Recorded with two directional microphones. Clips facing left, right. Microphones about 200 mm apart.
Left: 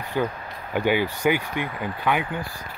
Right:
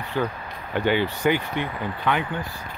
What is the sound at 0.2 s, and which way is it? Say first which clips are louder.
Speech: left 1 dB; 10° left (ahead or behind).